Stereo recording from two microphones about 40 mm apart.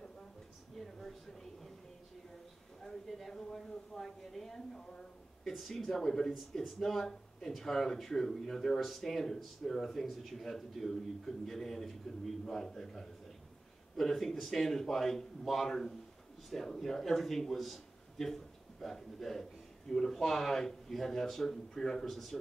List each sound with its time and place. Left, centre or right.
0.7 s a sound: centre
3.1 s speech: centre
5.5 s a man's voice: centre